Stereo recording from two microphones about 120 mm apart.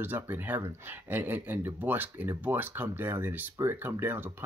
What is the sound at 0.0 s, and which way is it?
Speech, 15° right (ahead or behind).